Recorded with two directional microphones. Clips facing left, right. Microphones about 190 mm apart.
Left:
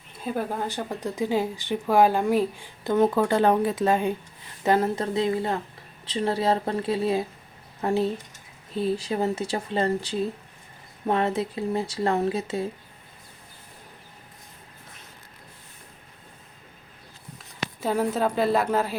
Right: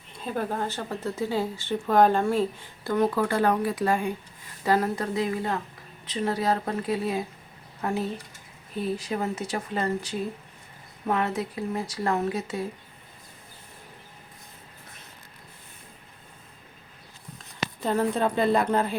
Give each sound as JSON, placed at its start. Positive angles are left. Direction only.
{"t": 0.3, "sound": "speech", "side_deg": 10}
{"t": 17.3, "sound": "speech", "side_deg": 5}